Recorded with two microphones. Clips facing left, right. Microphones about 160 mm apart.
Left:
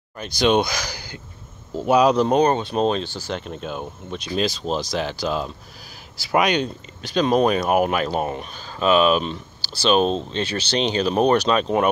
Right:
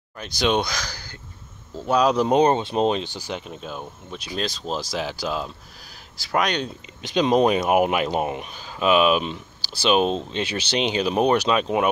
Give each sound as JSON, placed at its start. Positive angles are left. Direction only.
{"t": 0.2, "sound": "speech", "side_deg": 0}
{"t": 2.3, "sound": "speech", "side_deg": -25}
{"t": 7.0, "sound": "speech", "side_deg": -20}